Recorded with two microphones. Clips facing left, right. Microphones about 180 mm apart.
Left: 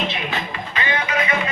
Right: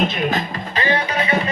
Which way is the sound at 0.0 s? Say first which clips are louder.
Right 5 dB; 45° right (ahead or behind).